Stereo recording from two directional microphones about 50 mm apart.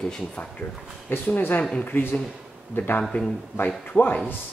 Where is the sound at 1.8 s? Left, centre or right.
Left.